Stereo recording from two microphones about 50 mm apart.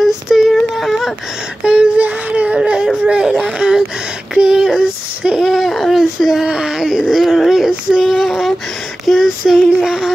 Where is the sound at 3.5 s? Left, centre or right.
Centre.